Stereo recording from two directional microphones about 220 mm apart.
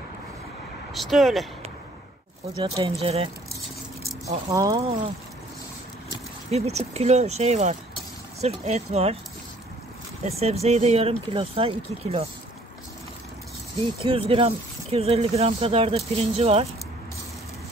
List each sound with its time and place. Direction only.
0.9 s speech: centre (ahead or behind)
2.6 s speech: 25° right (ahead or behind)
4.5 s speech: 15° right (ahead or behind)
6.5 s speech: 30° right (ahead or behind)
10.2 s speech: 30° right (ahead or behind)
13.9 s speech: 25° right (ahead or behind)